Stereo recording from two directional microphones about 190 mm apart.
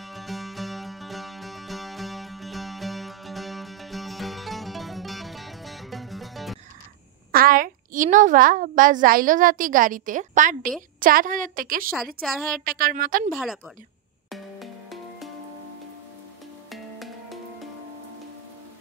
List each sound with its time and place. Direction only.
0.0 s music: centre (ahead or behind)
7.3 s a woman's voice: 50° right (ahead or behind)
12.2 s a woman's voice: centre (ahead or behind)
12.6 s a woman's voice: 50° right (ahead or behind)
14.3 s music: centre (ahead or behind)
16.7 s music: centre (ahead or behind)